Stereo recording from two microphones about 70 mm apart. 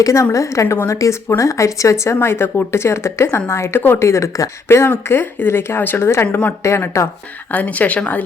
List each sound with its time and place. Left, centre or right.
0.0 s a woman's voice: left
7.5 s speech: left